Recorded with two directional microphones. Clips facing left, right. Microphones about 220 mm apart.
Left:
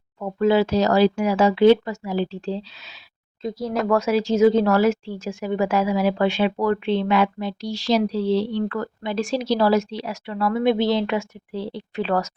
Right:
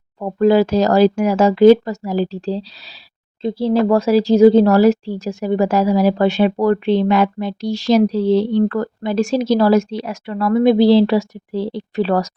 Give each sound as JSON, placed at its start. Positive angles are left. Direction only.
{"t": 0.2, "sound": "speech", "side_deg": -40}